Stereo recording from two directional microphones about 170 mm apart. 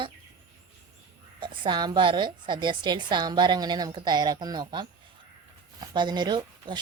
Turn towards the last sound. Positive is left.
turn(degrees=-25)  # may be behind; listen again after turning